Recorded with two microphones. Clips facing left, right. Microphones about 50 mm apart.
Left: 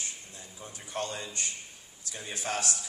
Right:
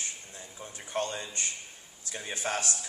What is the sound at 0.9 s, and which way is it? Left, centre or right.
Speech, right.